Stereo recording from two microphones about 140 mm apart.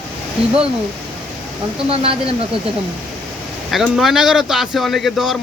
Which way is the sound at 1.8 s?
45° right (ahead or behind).